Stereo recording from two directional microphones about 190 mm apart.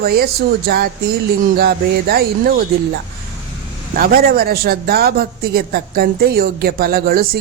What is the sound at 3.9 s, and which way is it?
Speech, 50° right (ahead or behind).